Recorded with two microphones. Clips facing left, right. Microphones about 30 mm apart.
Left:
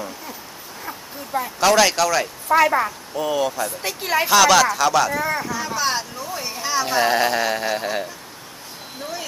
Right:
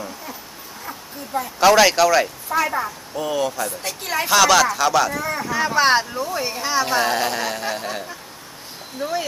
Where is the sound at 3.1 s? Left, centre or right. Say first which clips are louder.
Left 1 dB; centre.